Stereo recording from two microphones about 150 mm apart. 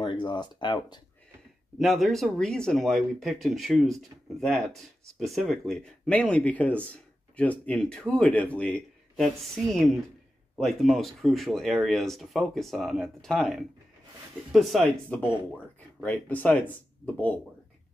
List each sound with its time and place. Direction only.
0.0 s speech: 30° left (ahead or behind)
1.8 s speech: centre (ahead or behind)